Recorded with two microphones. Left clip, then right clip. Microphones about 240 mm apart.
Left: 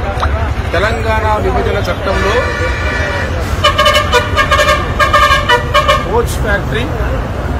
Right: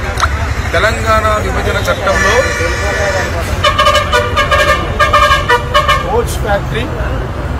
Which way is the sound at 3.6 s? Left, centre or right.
Left.